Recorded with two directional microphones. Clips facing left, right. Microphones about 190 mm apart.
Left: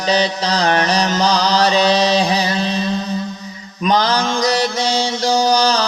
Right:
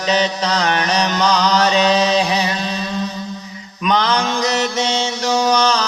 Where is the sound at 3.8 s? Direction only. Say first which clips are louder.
Left 1 dB; 35° left (ahead or behind).